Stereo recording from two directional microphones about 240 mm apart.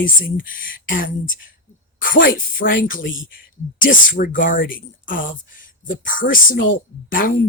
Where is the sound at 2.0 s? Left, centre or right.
Left.